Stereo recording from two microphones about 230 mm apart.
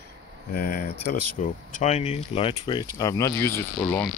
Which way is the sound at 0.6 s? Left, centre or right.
Left.